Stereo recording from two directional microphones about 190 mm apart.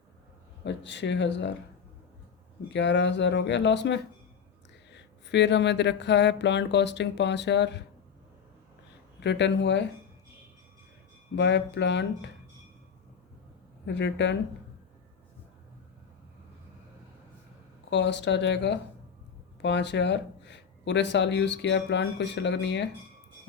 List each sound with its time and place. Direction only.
0.6 s speech: 70° left (ahead or behind)
2.6 s speech: 70° left (ahead or behind)
9.2 s speech: 65° left (ahead or behind)
11.3 s speech: 70° left (ahead or behind)
13.8 s speech: 65° left (ahead or behind)
17.9 s speech: 65° left (ahead or behind)